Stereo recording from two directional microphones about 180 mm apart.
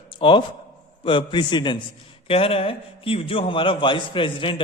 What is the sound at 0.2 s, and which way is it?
A man's voice, 30° left (ahead or behind).